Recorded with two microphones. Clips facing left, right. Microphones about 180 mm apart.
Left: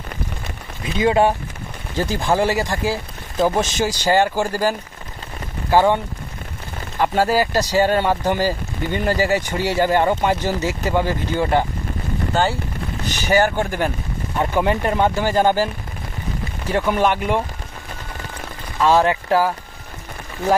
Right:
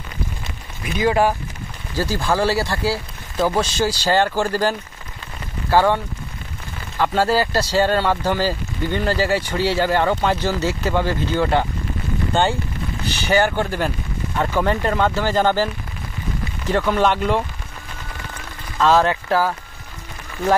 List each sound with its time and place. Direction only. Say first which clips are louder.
0.8 s speech: left 1 dB; 25° left (ahead or behind)
7.0 s speech: left 1 dB; 15° left (ahead or behind)
13.6 s speech: left 1 dB; 15° left (ahead or behind)
18.8 s speech: even; 15° left (ahead or behind)